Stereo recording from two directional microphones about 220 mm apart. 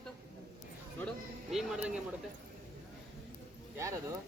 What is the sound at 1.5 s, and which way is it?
Speech, centre (ahead or behind).